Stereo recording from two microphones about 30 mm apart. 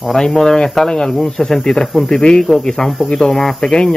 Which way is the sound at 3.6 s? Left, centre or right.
Left.